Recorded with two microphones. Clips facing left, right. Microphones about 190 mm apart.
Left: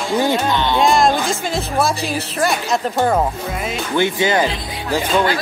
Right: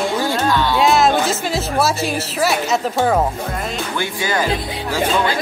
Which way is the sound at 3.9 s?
20° left (ahead or behind).